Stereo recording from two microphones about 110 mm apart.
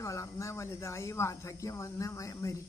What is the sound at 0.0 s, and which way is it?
Speech, 30° left (ahead or behind).